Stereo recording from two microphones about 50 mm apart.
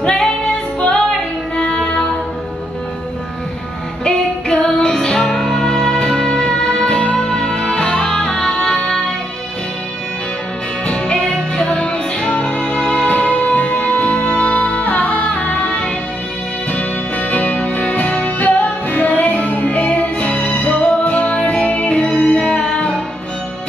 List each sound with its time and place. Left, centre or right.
0.0 s female singing: centre
0.7 s music: centre
4.0 s music: centre
10.9 s music: centre